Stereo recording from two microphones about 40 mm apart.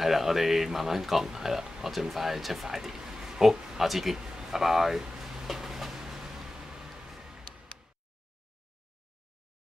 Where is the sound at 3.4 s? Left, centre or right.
Centre.